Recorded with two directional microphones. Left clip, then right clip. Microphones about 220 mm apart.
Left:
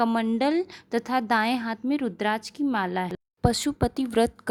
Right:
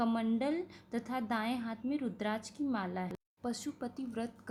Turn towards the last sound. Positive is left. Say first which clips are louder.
# left 17 dB
turn(degrees=40)  # may be behind; listen again after turning